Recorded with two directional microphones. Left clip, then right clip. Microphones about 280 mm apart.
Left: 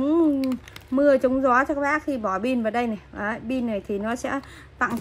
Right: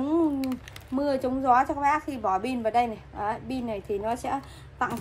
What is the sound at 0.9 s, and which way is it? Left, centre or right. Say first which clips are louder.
A woman's voice: left 8 dB; left.